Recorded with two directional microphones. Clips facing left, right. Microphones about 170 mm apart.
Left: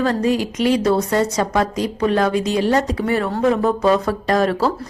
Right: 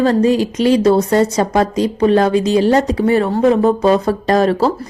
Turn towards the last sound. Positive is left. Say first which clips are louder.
# right 4 dB
turn(degrees=-30)  # may be behind; listen again after turning